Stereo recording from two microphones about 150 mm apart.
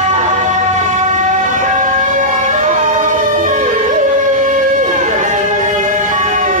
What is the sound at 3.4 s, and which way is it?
Music, 55° right (ahead or behind).